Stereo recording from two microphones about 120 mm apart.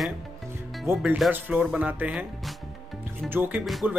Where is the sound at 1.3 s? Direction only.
15° right (ahead or behind).